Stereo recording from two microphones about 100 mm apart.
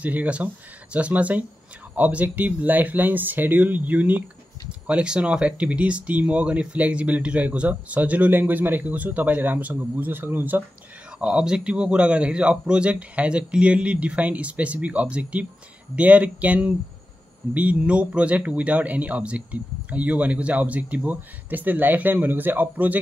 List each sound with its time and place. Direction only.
0.0 s speech: 15° right (ahead or behind)
11.1 s speech: 5° right (ahead or behind)